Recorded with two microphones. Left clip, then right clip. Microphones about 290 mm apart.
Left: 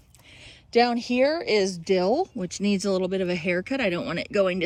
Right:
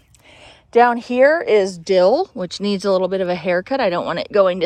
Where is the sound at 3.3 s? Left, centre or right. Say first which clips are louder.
Right 8 dB; centre.